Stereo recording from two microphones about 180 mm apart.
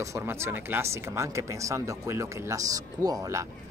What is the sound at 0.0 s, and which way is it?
Speech, 15° right (ahead or behind).